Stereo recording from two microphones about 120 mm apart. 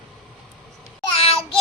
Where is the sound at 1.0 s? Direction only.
50° left (ahead or behind).